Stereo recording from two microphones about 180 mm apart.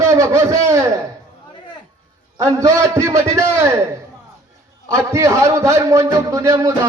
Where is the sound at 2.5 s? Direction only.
15° right (ahead or behind).